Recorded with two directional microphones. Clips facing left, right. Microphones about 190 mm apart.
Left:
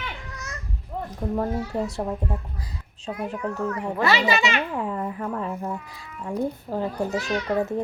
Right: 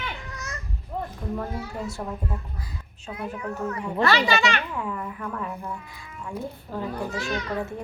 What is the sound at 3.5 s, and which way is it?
Speech, 25° right (ahead or behind).